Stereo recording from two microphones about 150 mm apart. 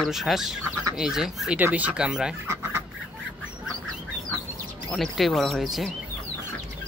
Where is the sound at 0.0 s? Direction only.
Centre (ahead or behind).